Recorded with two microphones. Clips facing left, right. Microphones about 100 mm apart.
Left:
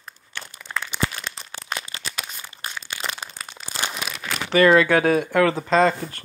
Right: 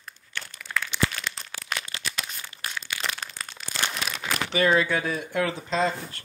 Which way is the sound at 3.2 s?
10° left (ahead or behind).